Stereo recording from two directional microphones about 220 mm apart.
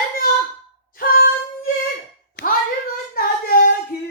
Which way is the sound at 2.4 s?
50° left (ahead or behind).